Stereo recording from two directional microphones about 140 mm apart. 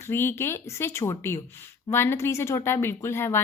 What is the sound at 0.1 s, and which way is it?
A woman's voice, 15° left (ahead or behind).